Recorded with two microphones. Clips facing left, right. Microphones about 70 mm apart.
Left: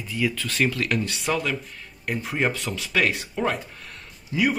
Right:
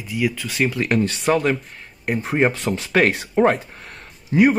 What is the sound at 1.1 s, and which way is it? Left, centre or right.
A man's voice, right.